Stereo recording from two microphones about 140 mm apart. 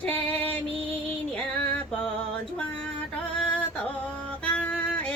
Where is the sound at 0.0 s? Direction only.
10° left (ahead or behind).